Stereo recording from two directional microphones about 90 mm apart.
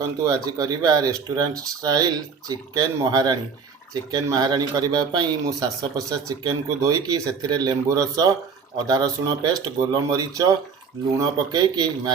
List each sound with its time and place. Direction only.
0.0 s speech: 45° right (ahead or behind)